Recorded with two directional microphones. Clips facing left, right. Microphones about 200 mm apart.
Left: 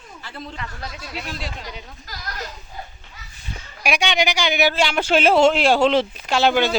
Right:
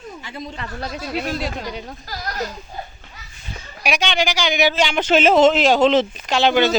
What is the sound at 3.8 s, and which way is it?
Speech, 10° left (ahead or behind).